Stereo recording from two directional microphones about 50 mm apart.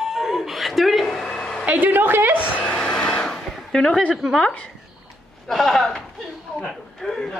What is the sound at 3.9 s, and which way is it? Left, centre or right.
Speech, left.